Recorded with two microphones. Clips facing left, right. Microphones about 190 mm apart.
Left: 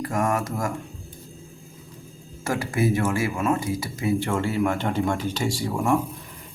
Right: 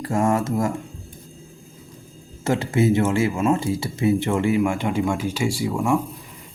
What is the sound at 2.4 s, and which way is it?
Speech, 25° right (ahead or behind).